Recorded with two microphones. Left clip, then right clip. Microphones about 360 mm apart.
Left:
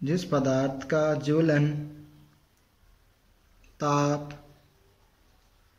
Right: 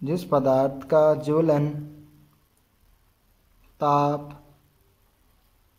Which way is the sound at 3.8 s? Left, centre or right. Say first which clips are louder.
Right 5 dB; centre.